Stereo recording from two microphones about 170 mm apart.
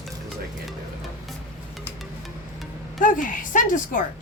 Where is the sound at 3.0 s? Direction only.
50° left (ahead or behind).